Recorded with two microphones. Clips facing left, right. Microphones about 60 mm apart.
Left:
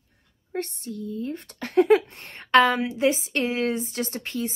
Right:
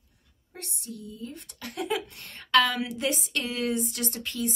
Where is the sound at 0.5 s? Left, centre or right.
Left.